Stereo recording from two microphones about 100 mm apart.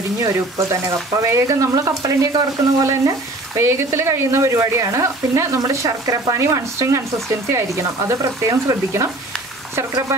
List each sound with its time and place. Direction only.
0.2 s speech: 35° right (ahead or behind)